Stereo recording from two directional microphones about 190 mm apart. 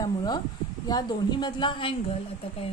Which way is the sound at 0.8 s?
20° left (ahead or behind).